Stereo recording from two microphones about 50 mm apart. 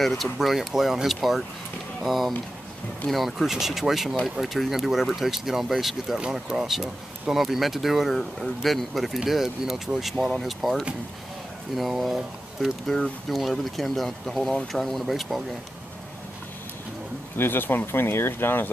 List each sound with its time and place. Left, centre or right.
0.0 s speech: centre
17.4 s speech: left